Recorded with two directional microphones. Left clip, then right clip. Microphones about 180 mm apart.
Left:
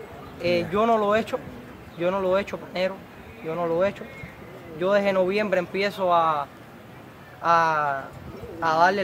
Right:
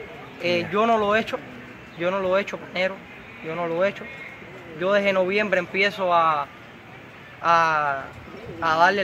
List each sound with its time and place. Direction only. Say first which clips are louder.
0.4 s speech: right 1 dB; 15° left (ahead or behind)
3.4 s speech: even; 10° left (ahead or behind)